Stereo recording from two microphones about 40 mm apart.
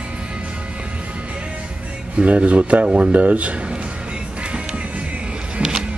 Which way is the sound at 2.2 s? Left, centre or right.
Right.